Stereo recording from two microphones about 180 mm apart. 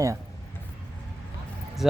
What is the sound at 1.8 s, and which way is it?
Speech, 5° right (ahead or behind).